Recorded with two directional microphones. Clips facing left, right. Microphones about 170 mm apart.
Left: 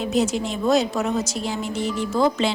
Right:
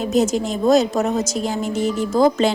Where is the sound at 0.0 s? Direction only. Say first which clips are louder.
Right 4 dB; 45° right (ahead or behind).